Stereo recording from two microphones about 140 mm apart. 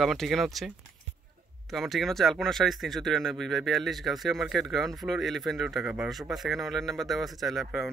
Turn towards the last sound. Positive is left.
turn(degrees=0)  # may be behind; listen again after turning